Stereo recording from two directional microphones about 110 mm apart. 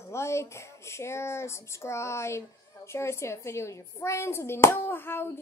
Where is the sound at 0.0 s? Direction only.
25° left (ahead or behind).